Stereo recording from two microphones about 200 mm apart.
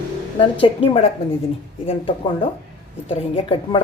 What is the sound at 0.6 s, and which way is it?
Speech, 30° left (ahead or behind).